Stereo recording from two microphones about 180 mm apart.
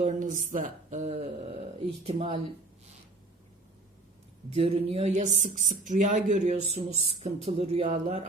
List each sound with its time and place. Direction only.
0.0 s speech: 45° right (ahead or behind)
4.5 s speech: 35° right (ahead or behind)